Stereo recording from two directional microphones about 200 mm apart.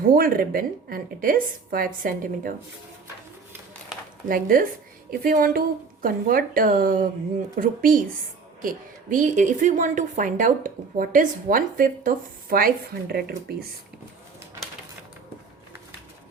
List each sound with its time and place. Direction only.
0.0 s a woman's voice: 45° right (ahead or behind)
4.3 s a woman's voice: 45° right (ahead or behind)